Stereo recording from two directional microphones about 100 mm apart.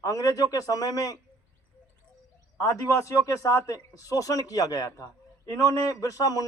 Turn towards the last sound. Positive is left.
turn(degrees=35)  # may be behind; listen again after turning